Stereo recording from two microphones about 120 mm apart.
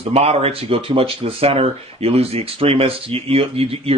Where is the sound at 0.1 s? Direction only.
60° right (ahead or behind).